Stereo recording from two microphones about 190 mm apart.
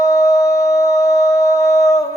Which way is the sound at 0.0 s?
15° left (ahead or behind).